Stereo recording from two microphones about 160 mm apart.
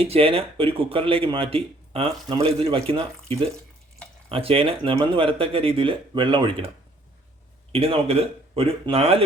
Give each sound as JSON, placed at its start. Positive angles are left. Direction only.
{"t": 0.0, "sound": "speech", "side_deg": -35}
{"t": 7.7, "sound": "speech", "side_deg": -40}